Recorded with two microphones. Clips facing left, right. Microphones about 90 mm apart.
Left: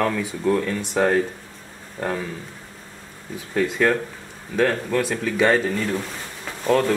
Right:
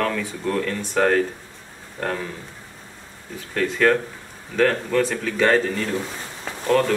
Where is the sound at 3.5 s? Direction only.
10° left (ahead or behind).